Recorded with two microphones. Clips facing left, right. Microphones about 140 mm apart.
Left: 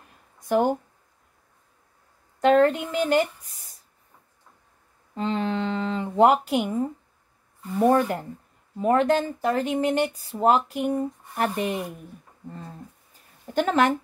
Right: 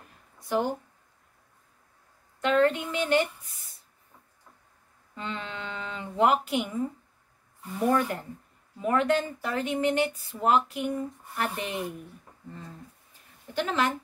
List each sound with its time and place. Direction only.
0.5 s a woman's voice: 55° left (ahead or behind)
2.4 s a woman's voice: 45° left (ahead or behind)
5.1 s speech: 35° left (ahead or behind)
13.5 s a woman's voice: 50° left (ahead or behind)